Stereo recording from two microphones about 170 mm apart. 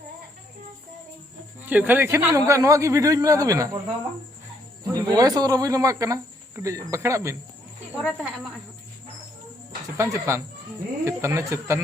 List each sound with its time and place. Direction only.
1.6 s a man's voice: 10° right (ahead or behind)
4.9 s a man's voice: 20° right (ahead or behind)
8.0 s speech: centre (ahead or behind)
10.0 s speech: 15° right (ahead or behind)